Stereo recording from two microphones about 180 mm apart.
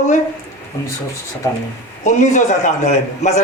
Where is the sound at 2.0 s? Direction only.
40° left (ahead or behind).